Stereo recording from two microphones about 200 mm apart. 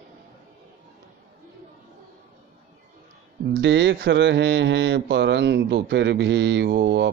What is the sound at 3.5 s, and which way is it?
Speech, 60° right (ahead or behind).